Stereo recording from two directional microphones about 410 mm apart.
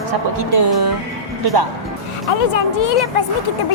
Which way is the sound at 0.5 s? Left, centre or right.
Right.